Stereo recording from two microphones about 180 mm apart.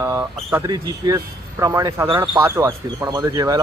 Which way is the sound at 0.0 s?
15° right (ahead or behind).